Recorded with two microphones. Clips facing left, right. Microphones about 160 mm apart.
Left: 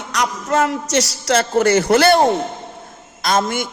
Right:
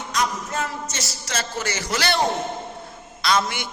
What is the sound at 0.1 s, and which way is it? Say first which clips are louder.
A man's voice: left 6 dB; 75° left (ahead or behind).